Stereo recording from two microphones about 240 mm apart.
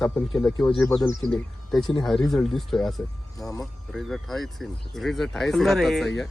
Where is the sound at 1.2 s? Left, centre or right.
Centre.